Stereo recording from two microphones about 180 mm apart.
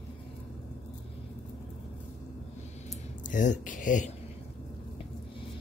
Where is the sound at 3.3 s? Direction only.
45° left (ahead or behind).